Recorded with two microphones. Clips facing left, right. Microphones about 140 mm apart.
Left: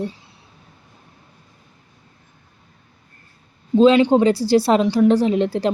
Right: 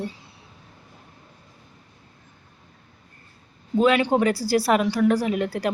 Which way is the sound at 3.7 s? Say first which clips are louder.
Left 6 dB; 25° left (ahead or behind).